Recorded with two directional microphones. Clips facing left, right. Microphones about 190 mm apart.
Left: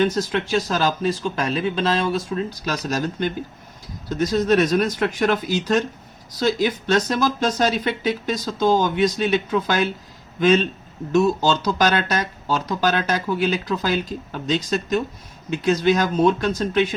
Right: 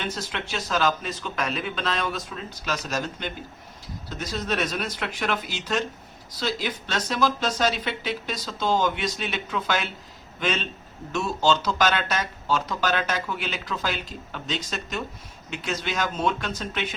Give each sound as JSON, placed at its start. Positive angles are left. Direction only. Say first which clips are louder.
{"t": 0.0, "sound": "speech", "louder": "left 11 dB", "side_deg": 40}
{"t": 2.3, "sound": "speech", "louder": "left 7 dB", "side_deg": 40}